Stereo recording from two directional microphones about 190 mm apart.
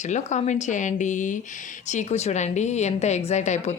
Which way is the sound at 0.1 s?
40° left (ahead or behind).